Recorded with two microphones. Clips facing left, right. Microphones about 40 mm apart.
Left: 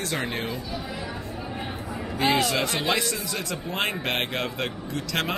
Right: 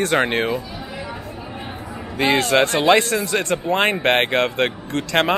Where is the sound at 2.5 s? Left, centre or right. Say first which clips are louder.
Right 10 dB; right.